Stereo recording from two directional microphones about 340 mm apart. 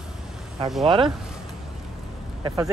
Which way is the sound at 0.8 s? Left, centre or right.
Centre.